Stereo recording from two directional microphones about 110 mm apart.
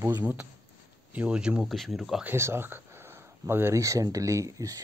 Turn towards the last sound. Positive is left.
turn(degrees=-30)  # may be behind; listen again after turning